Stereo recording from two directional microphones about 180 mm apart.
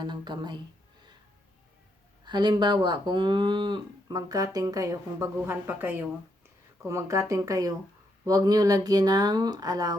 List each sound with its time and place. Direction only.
0.0 s speech: 25° right (ahead or behind)
2.2 s speech: 25° right (ahead or behind)